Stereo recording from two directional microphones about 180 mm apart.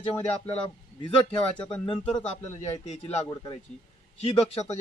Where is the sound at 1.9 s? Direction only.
30° left (ahead or behind).